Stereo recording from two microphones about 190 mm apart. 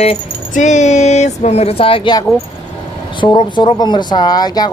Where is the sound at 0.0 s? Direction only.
35° left (ahead or behind).